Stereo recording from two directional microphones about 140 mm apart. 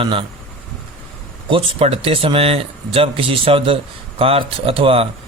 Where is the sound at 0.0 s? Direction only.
40° right (ahead or behind).